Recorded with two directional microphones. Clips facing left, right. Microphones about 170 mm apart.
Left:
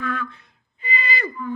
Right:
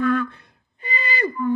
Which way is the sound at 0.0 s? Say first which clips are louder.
Right 8 dB; 50° right (ahead or behind).